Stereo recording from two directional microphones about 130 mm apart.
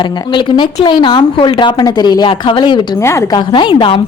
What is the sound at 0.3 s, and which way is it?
Speech, 35° left (ahead or behind).